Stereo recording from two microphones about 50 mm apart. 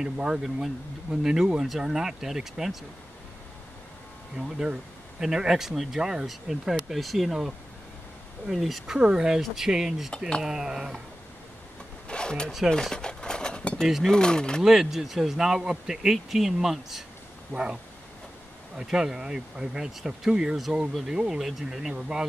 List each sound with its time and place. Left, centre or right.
0.0 s speech: centre
5.2 s speech: centre
12.1 s a sound: centre
13.8 s speech: centre
14.1 s speech: centre
14.6 s speech: centre
17.5 s speech: centre
18.8 s speech: centre